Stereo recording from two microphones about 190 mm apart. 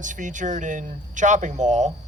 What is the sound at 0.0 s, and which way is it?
Speech, 40° right (ahead or behind).